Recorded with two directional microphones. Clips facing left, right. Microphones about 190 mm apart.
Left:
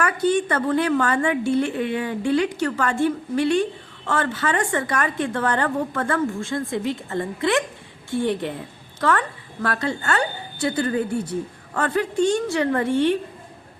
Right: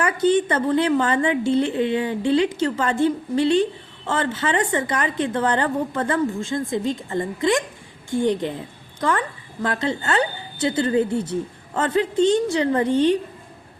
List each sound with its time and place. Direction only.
0.0 s a woman's voice: 20° right (ahead or behind)